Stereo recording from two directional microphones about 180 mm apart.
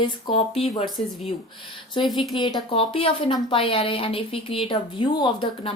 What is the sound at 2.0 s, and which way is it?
Speech, 30° left (ahead or behind).